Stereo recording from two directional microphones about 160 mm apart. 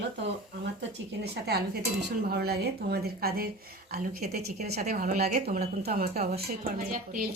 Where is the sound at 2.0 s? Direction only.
85° right.